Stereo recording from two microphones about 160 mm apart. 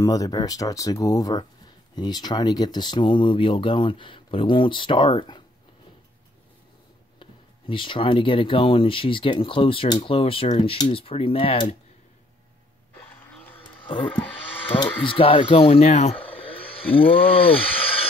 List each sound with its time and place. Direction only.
0.0 s speech: 20° left (ahead or behind)
7.2 s speech: 30° left (ahead or behind)
14.7 s speech: 30° left (ahead or behind)